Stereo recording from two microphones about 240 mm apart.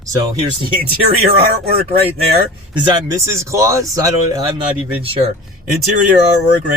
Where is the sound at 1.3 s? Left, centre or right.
Right.